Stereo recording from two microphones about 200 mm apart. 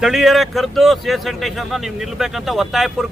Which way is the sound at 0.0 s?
Centre (ahead or behind).